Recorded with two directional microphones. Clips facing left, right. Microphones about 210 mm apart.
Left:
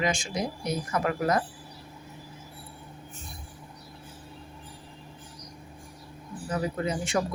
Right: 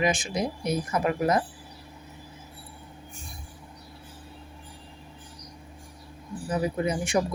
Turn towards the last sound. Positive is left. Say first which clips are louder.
# right 3 dB
turn(degrees=-15)  # may be behind; listen again after turning